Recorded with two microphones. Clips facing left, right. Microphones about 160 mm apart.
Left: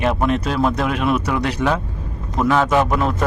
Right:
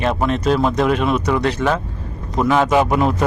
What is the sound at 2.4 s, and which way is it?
Speech, 5° right (ahead or behind).